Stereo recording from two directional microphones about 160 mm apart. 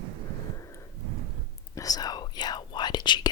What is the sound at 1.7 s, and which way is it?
Whispering, 20° left (ahead or behind).